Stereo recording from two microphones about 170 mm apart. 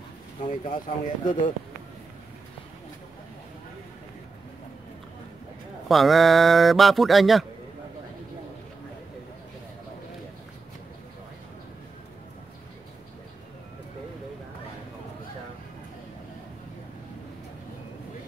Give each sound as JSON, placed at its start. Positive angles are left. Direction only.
{"t": 0.5, "sound": "speech", "side_deg": 50}
{"t": 5.9, "sound": "speech", "side_deg": 0}